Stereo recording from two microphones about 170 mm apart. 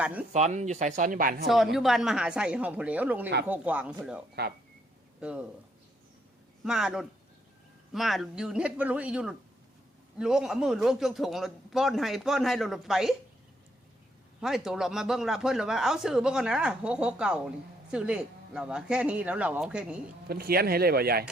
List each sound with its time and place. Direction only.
0.0 s speech: 10° right (ahead or behind)
0.3 s speech: 40° right (ahead or behind)
1.5 s speech: centre (ahead or behind)
4.4 s speech: 70° right (ahead or behind)
5.2 s speech: 5° right (ahead or behind)
6.7 s speech: 5° right (ahead or behind)
14.4 s speech: centre (ahead or behind)
20.2 s speech: 65° right (ahead or behind)